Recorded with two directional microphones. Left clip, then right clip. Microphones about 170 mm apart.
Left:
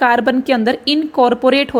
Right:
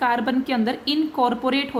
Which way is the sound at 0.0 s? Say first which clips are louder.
Left 8 dB; 40° left (ahead or behind).